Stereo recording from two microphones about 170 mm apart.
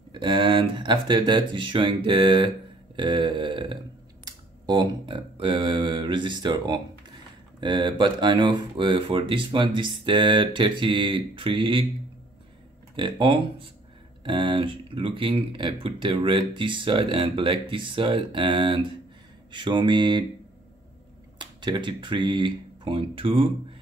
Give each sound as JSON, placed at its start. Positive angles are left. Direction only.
{"t": 0.1, "sound": "speech", "side_deg": -30}
{"t": 4.2, "sound": "a sound", "side_deg": -25}
{"t": 7.6, "sound": "speech", "side_deg": -25}
{"t": 12.9, "sound": "speech", "side_deg": -30}
{"t": 21.4, "sound": "speech", "side_deg": -25}